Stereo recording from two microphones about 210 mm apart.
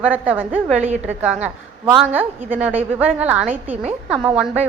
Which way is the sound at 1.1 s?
10° right (ahead or behind).